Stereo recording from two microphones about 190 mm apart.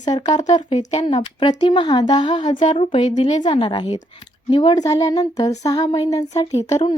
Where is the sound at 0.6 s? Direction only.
35° left (ahead or behind).